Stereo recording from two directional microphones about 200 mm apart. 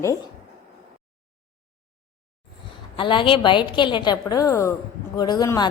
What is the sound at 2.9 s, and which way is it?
A woman's voice, 25° left (ahead or behind).